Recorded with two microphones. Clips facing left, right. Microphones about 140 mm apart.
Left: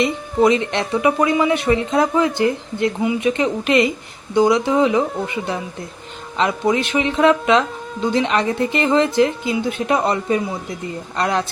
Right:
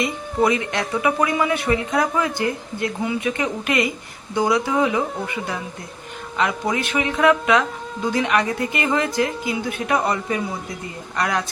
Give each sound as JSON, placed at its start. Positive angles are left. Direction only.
{"t": 0.4, "sound": "a man's voice", "side_deg": 25}